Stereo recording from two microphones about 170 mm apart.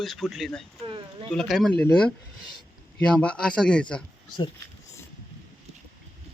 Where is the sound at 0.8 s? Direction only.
30° right (ahead or behind).